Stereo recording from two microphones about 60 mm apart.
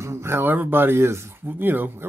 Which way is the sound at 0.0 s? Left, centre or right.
Right.